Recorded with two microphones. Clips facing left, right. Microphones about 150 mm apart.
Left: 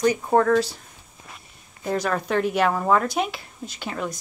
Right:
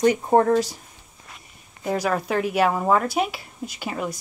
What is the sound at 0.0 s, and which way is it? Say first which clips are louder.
Speech: right 2 dB; 25° right (ahead or behind).